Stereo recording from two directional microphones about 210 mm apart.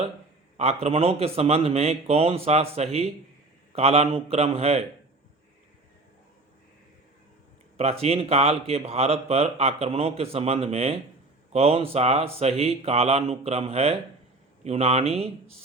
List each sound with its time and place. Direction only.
0.5 s speech: 30° right (ahead or behind)
7.8 s speech: 30° right (ahead or behind)